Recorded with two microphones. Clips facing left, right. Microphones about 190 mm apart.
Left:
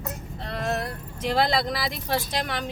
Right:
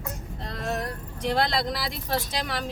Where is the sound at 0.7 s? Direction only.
Centre (ahead or behind).